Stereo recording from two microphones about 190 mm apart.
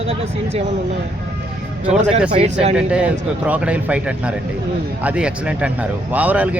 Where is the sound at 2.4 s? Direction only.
35° right (ahead or behind).